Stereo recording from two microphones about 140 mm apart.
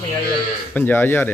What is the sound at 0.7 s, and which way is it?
Speech, 15° left (ahead or behind).